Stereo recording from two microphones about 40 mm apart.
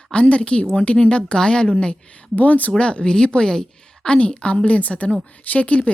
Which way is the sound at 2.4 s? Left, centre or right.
Left.